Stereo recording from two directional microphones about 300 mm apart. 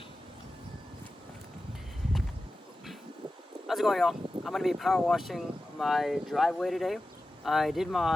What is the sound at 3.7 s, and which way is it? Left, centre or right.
Speech, centre.